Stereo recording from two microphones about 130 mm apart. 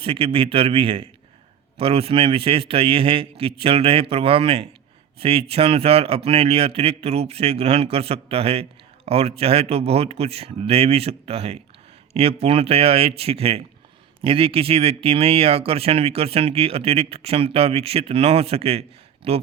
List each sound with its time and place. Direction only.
0.0 s speech: 45° right (ahead or behind)